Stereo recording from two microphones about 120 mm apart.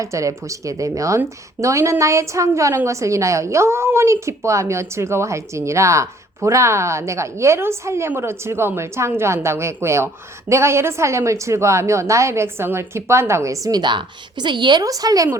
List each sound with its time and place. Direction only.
0.0 s a woman's voice: 25° right (ahead or behind)